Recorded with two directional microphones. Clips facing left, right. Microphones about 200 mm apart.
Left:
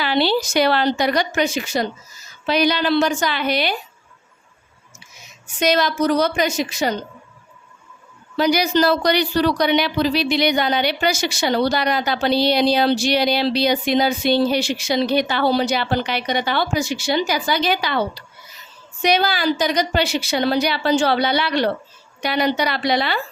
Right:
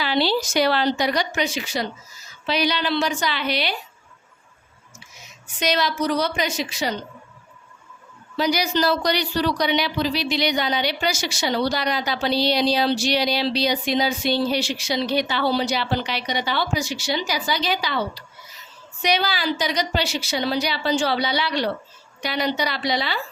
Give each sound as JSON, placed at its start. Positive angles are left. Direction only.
{"t": 0.0, "sound": "a woman's voice", "side_deg": 60}
{"t": 5.5, "sound": "a woman's voice", "side_deg": 50}
{"t": 8.4, "sound": "speech", "side_deg": 55}